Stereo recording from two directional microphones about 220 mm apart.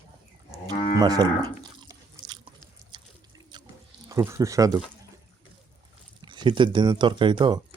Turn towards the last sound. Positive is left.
turn(degrees=-20)  # may be behind; listen again after turning